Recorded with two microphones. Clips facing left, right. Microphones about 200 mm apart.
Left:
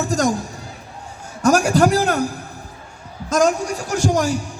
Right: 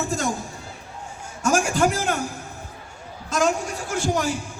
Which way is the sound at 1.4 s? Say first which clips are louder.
Left 6 dB; 40° left (ahead or behind).